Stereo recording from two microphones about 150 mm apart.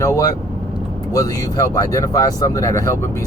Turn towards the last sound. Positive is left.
turn(degrees=20)  # may be behind; listen again after turning